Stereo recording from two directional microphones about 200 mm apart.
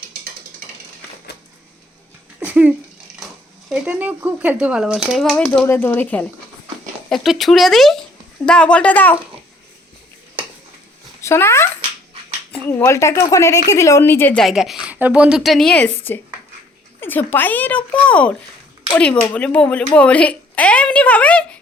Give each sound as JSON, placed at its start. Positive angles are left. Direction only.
{"t": 2.4, "sound": "a sound", "side_deg": -5}
{"t": 3.7, "sound": "speech", "side_deg": -5}
{"t": 11.2, "sound": "speech", "side_deg": 15}